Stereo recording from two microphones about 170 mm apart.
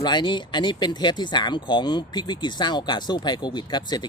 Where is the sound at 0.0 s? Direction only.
25° left (ahead or behind).